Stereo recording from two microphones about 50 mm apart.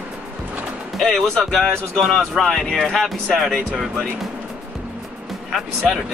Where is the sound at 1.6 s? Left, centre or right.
Centre.